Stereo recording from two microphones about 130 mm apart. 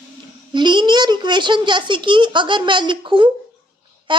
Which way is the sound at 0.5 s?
35° right (ahead or behind).